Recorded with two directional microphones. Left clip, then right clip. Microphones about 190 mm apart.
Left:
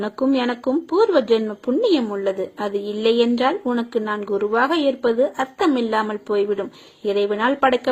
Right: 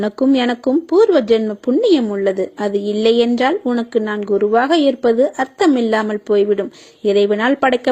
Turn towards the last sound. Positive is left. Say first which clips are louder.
# right 3 dB
turn(degrees=-35)  # may be behind; listen again after turning